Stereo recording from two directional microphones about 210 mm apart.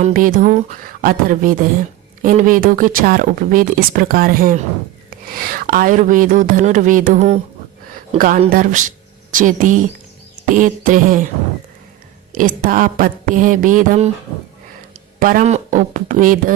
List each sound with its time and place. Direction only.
0.0 s speech: 40° right (ahead or behind)
8.4 s speech: 40° right (ahead or behind)
12.3 s speech: 40° right (ahead or behind)
15.2 s speech: 40° right (ahead or behind)